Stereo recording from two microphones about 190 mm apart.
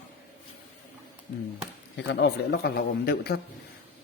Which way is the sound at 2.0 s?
70° left (ahead or behind).